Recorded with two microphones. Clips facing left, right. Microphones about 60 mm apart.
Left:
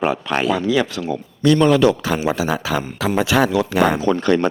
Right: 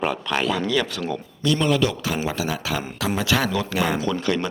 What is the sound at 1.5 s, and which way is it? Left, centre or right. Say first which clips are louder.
Speech: left 7 dB; left.